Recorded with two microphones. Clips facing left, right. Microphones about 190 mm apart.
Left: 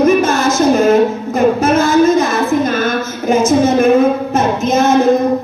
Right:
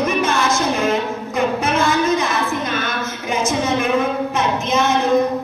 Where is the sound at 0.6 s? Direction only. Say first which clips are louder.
Left 9 dB; 45° left (ahead or behind).